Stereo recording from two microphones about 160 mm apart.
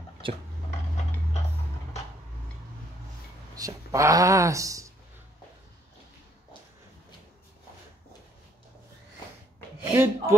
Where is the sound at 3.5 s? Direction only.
20° right (ahead or behind).